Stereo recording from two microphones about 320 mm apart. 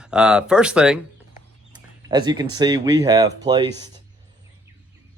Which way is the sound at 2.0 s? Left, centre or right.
Centre.